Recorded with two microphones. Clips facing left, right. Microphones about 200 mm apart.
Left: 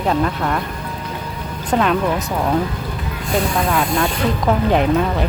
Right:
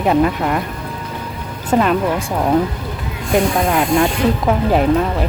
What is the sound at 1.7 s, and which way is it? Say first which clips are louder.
Speech: right 2 dB; 5° right (ahead or behind).